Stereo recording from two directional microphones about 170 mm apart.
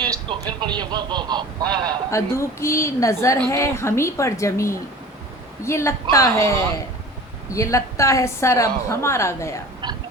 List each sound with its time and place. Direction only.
0.0 s a man's voice: 25° right (ahead or behind)
2.0 s a woman's voice: 15° left (ahead or behind)
7.5 s a woman's voice: 20° left (ahead or behind)
9.8 s a sound: 25° right (ahead or behind)